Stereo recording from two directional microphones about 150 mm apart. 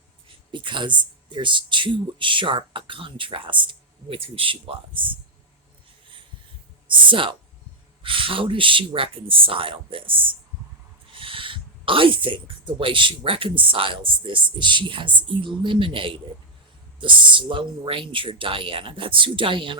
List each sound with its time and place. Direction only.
0.3 s speech: 35° right (ahead or behind)
6.8 s speech: 35° right (ahead or behind)